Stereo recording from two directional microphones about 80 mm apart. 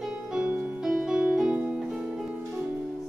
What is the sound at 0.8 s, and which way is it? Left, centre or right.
Music, centre.